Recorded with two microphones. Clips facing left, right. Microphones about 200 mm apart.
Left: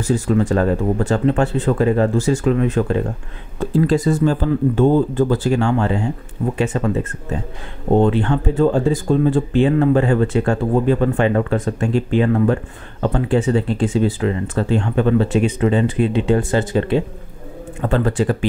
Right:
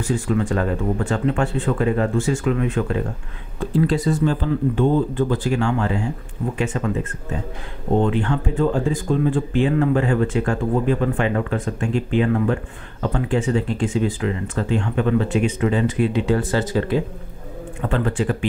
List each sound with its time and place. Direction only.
0.0 s speech: 40° left (ahead or behind)
3.8 s speech: 45° left (ahead or behind)
8.0 s speech: 30° left (ahead or behind)
17.8 s speech: 40° left (ahead or behind)